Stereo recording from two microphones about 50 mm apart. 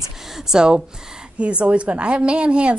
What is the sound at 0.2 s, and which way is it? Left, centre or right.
A woman's voice, centre.